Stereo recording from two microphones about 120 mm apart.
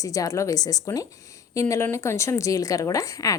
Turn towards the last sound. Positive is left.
turn(degrees=30)  # may be behind; listen again after turning